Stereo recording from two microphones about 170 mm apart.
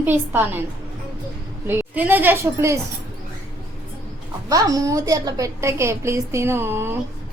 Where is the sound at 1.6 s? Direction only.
10° right (ahead or behind).